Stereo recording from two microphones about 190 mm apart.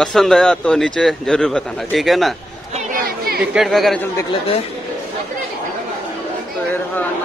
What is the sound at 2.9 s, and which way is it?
Chatter, 50° right (ahead or behind).